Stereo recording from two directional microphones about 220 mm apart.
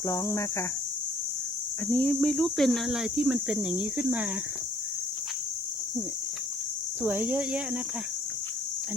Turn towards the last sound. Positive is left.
turn(degrees=-5)  # may be behind; listen again after turning